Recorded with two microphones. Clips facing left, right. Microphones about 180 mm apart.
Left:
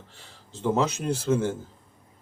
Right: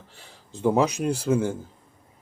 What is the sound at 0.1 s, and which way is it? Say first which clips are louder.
Speech: right 3 dB; 15° right (ahead or behind).